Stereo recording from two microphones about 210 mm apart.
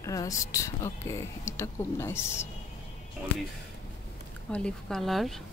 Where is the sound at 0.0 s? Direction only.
15° left (ahead or behind).